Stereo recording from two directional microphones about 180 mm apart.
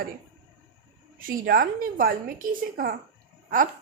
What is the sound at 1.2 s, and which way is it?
Speech, 55° right (ahead or behind).